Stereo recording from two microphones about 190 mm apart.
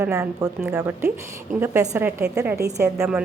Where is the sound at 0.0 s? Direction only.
15° right (ahead or behind).